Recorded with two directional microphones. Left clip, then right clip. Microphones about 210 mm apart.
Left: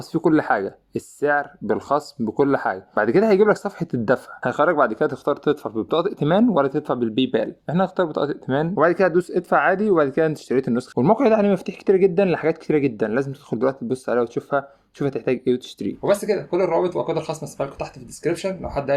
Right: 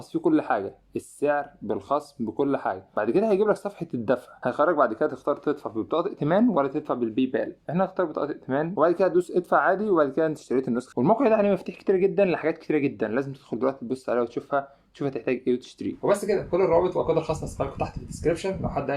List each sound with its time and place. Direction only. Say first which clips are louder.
0.1 s speech: left 5 dB; 30° left (ahead or behind); by 18.9 s 50° left (ahead or behind)